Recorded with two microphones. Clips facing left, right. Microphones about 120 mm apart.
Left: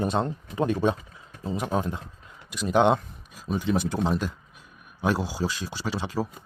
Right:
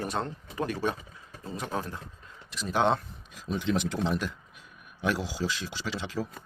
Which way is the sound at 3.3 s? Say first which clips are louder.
Left 3 dB; 45° left (ahead or behind).